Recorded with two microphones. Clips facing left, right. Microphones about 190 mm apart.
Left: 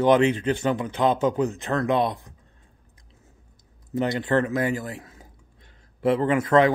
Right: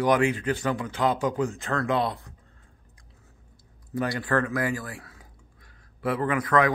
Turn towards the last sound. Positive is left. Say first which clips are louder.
# left 4 dB
turn(degrees=25)  # may be behind; listen again after turning